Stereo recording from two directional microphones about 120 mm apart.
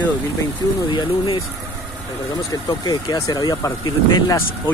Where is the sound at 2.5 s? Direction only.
35° left (ahead or behind).